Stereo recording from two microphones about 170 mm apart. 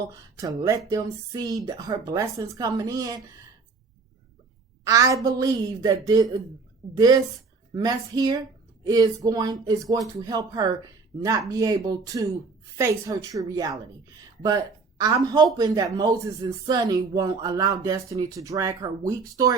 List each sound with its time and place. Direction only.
0.3 s speech: 20° right (ahead or behind)
4.8 s speech: 20° right (ahead or behind)